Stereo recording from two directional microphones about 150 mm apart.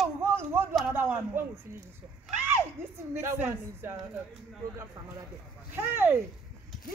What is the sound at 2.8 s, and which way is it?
Speech, 15° right (ahead or behind).